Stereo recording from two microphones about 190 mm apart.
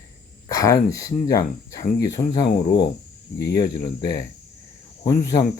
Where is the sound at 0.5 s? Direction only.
15° left (ahead or behind).